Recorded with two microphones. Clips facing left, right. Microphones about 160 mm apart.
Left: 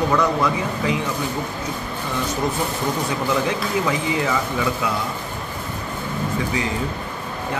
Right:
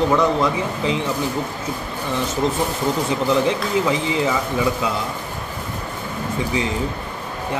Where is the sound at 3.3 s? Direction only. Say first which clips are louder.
Right 3 dB; 20° right (ahead or behind).